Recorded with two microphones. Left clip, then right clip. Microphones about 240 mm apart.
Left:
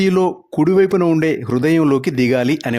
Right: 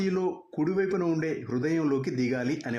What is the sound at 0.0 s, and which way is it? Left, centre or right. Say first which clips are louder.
Speech: left 13 dB; left.